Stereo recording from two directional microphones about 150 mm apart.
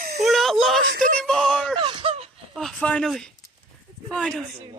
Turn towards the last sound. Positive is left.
turn(degrees=5)  # may be behind; listen again after turning